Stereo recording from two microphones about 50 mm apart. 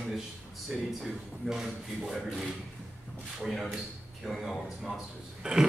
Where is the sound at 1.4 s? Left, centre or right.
Centre.